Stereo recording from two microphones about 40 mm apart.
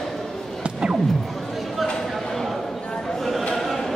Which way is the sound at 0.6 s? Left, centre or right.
Right.